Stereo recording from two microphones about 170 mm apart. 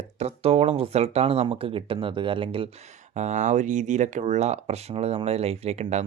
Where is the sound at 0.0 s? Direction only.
40° right (ahead or behind).